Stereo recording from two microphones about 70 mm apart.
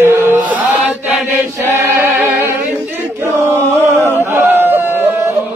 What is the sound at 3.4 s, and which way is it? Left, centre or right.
Chant, right.